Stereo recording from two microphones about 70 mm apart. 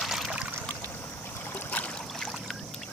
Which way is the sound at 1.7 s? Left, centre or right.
Left.